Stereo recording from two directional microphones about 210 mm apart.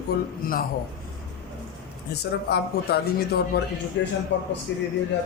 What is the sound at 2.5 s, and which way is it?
A man's voice, 50° left (ahead or behind).